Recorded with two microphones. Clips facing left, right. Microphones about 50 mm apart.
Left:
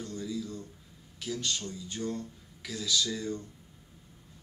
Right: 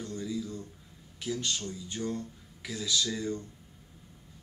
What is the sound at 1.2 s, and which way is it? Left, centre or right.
Speech, centre.